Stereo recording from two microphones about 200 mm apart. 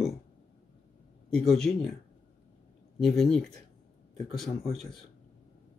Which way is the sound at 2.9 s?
Centre (ahead or behind).